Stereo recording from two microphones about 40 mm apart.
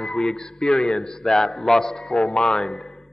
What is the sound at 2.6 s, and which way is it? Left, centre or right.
Speech, centre.